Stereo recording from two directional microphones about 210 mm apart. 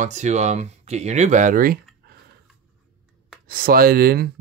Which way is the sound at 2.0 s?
50° right (ahead or behind).